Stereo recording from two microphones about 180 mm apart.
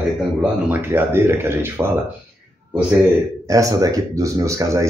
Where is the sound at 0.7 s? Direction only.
10° right (ahead or behind).